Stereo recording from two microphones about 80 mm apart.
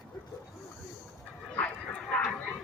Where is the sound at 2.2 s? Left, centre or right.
Centre.